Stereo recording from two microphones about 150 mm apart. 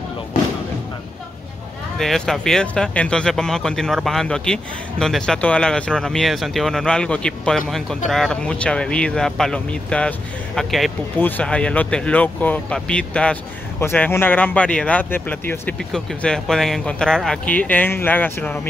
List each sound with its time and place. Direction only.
2.0 s speech: centre (ahead or behind)
11.1 s speech: 10° left (ahead or behind)